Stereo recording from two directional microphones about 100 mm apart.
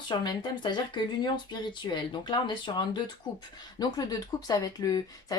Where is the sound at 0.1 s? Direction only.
50° left (ahead or behind).